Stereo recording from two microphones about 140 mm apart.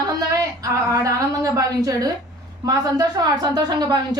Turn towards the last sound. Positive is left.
turn(degrees=-30)  # may be behind; listen again after turning